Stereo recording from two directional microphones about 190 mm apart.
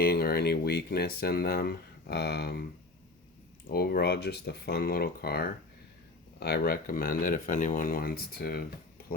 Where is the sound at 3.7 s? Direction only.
50° left (ahead or behind).